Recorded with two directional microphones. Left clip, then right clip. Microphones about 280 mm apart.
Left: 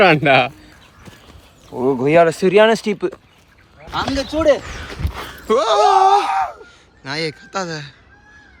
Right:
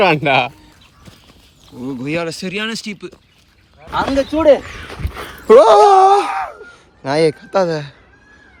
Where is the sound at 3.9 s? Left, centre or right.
Centre.